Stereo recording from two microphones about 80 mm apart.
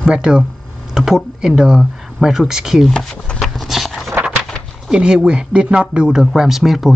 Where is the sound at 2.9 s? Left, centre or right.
Centre.